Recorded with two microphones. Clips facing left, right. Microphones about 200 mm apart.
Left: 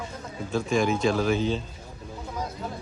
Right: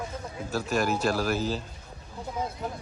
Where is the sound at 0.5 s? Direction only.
5° right (ahead or behind).